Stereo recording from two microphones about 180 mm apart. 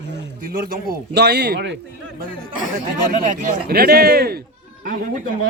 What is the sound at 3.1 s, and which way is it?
A man's voice, 40° right (ahead or behind).